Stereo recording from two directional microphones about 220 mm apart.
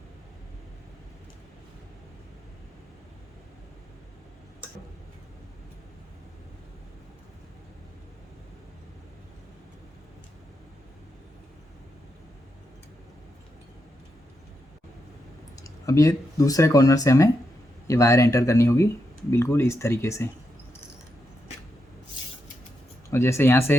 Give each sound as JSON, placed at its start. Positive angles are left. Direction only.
{"t": 15.5, "sound": "speech", "side_deg": 15}
{"t": 23.1, "sound": "speech", "side_deg": 10}